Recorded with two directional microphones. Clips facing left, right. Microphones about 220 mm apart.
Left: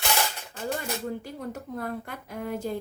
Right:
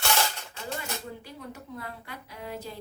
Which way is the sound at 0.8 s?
45° left (ahead or behind).